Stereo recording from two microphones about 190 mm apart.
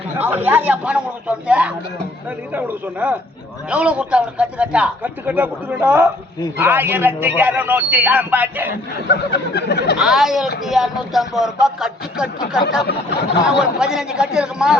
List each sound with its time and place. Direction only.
0.2 s a man's voice: 10° right (ahead or behind)
8.7 s speech: 60° left (ahead or behind)
10.0 s speech: centre (ahead or behind)
13.5 s speech: 5° right (ahead or behind)